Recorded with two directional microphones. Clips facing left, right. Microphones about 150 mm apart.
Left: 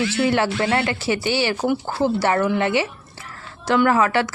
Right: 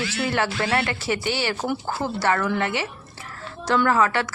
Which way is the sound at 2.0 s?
25° left (ahead or behind).